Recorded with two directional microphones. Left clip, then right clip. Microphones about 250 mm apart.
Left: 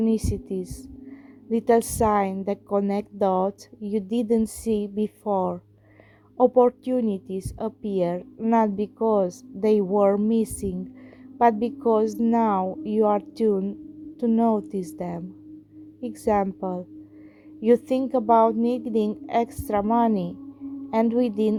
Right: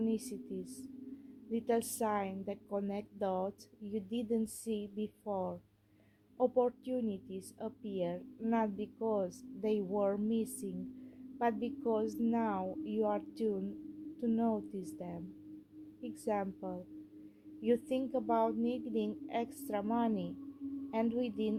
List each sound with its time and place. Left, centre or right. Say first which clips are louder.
0.0 s a woman's voice: left 13 dB; left